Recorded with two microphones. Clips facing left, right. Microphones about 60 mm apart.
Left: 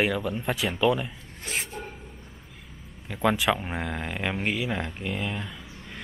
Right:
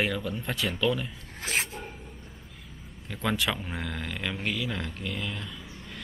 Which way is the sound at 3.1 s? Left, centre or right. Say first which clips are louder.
Left 5 dB; centre.